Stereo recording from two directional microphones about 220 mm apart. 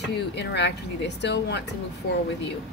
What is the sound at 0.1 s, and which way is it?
Speech, 50° left (ahead or behind).